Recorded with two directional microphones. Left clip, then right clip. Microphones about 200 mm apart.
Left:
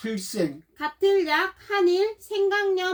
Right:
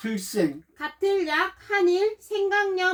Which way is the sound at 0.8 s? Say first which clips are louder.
Left 3 dB; 35° left (ahead or behind).